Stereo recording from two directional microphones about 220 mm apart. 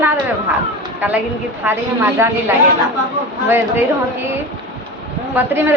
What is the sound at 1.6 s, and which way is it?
A woman's voice, 10° right (ahead or behind).